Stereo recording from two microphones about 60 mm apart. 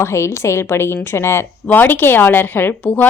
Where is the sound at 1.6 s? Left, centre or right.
Left.